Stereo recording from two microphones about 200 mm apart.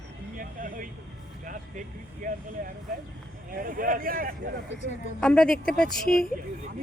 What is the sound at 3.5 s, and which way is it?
Speech, 45° right (ahead or behind).